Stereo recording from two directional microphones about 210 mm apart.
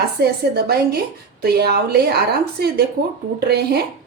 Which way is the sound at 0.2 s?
50° right (ahead or behind).